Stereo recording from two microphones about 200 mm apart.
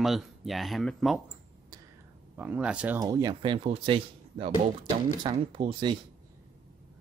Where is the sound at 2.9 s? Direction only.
20° right (ahead or behind).